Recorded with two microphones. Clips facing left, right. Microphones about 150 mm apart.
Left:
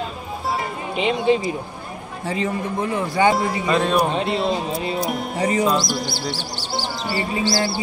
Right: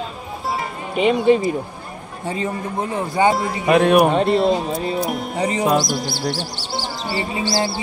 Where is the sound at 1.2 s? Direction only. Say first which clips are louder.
Right 2 dB; 50° right (ahead or behind).